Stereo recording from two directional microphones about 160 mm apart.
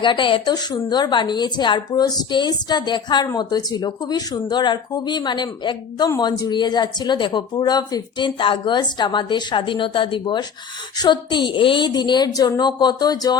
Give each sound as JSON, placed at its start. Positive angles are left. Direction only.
{"t": 0.0, "sound": "speech", "side_deg": 30}